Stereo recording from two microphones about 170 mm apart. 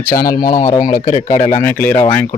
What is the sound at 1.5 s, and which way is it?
Speech, 10° left (ahead or behind).